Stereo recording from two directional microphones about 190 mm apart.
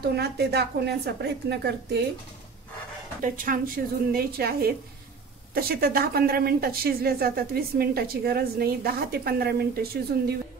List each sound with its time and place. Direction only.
0.0 s a woman's voice: 60° right (ahead or behind)
3.2 s speech: 45° right (ahead or behind)